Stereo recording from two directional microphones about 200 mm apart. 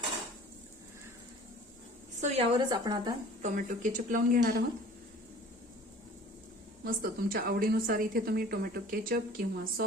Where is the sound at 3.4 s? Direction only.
40° right (ahead or behind).